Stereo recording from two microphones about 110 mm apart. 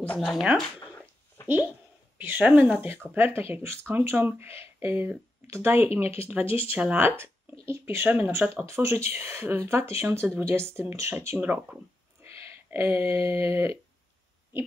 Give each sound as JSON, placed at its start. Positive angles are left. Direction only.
{"t": 0.0, "sound": "speech", "side_deg": 10}
{"t": 2.1, "sound": "speech", "side_deg": -15}
{"t": 12.2, "sound": "a sound", "side_deg": -20}
{"t": 13.3, "sound": "speech", "side_deg": -20}